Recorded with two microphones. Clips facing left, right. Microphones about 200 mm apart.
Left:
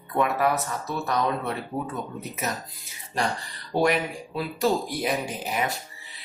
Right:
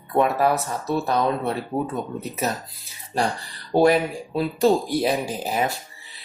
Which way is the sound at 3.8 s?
30° right (ahead or behind).